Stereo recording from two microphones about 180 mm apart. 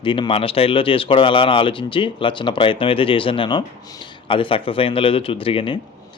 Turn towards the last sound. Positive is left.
turn(degrees=30)  # may be behind; listen again after turning